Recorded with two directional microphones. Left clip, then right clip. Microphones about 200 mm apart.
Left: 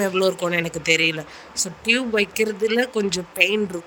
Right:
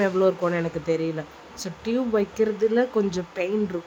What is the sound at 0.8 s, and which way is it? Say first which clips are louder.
Speech: left 6 dB; 60° left (ahead or behind).